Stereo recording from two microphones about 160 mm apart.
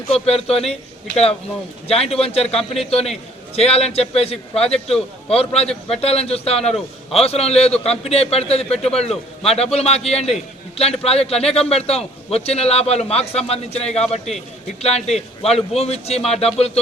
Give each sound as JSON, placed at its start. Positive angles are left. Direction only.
{"t": 0.1, "sound": "a man's voice", "side_deg": 40}